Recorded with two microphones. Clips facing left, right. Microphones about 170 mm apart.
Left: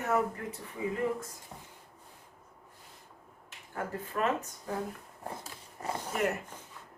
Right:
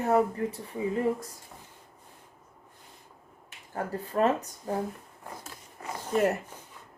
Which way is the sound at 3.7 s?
35° right (ahead or behind).